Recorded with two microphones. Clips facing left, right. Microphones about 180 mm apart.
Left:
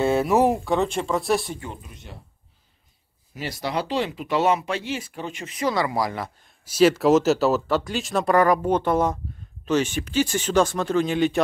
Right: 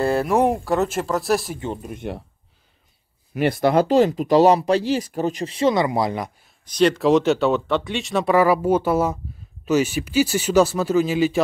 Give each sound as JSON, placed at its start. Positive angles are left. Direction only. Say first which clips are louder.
{"t": 0.0, "sound": "speech", "louder": "even", "side_deg": 0}
{"t": 1.7, "sound": "speech", "louder": "right 11 dB", "side_deg": -50}
{"t": 3.3, "sound": "speech", "louder": "right 10 dB", "side_deg": -55}
{"t": 6.6, "sound": "speech", "louder": "even", "side_deg": 5}